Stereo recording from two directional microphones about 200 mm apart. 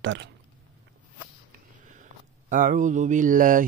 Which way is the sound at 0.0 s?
70° right (ahead or behind).